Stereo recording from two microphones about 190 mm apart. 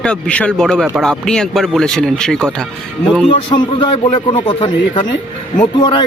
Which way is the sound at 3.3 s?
25° left (ahead or behind).